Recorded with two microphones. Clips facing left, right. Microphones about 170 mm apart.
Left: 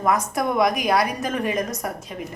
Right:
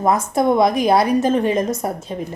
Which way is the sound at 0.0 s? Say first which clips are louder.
Right 5 dB; 25° right (ahead or behind).